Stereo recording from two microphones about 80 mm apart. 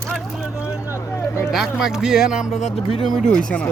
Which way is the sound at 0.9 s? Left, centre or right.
Left.